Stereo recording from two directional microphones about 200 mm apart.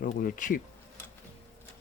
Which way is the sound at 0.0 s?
45° left (ahead or behind).